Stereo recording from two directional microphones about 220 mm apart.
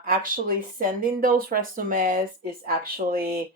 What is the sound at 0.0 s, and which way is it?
Speech, 40° right (ahead or behind).